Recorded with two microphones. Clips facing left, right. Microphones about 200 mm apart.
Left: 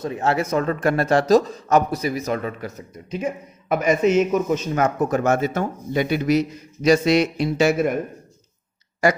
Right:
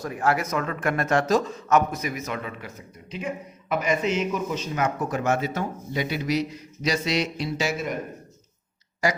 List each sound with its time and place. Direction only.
0.0 s a man's voice: 25° left (ahead or behind); by 7.9 s 55° left (ahead or behind)